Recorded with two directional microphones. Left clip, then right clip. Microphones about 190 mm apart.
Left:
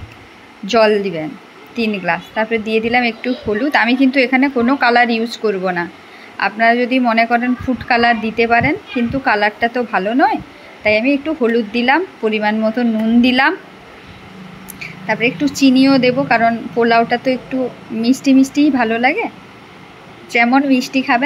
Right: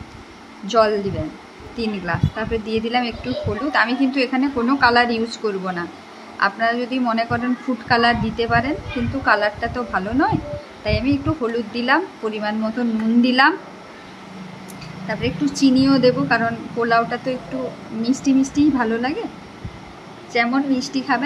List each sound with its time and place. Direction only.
0.7 s a woman's voice: 25° left (ahead or behind)
15.0 s a woman's voice: 25° left (ahead or behind)
20.3 s a woman's voice: 30° left (ahead or behind)